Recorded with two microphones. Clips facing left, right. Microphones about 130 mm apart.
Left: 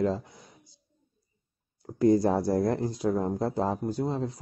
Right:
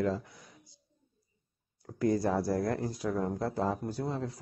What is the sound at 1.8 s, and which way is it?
Speech, 25° left (ahead or behind).